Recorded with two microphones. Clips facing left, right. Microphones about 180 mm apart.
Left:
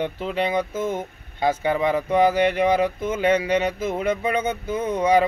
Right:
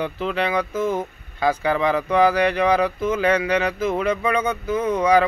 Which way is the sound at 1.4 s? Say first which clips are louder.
Right 1 dB; 25° left (ahead or behind).